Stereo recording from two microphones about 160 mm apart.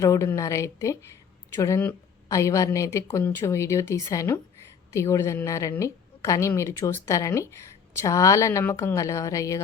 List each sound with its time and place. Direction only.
0.0 s a woman's voice: 20° left (ahead or behind)